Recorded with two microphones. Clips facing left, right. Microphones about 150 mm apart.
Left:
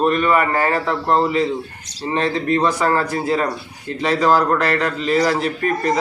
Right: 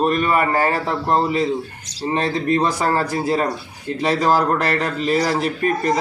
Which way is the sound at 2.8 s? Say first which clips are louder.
Left 1 dB; 35° right (ahead or behind).